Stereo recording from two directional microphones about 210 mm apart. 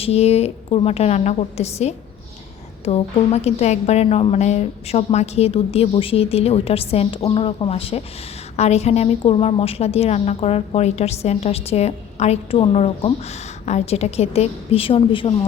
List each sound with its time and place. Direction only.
0.0 s a woman's voice: 30° left (ahead or behind)